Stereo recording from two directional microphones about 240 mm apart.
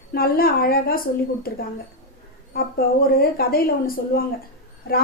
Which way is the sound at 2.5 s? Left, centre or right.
Left.